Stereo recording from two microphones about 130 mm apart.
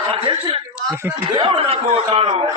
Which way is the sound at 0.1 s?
40° right (ahead or behind).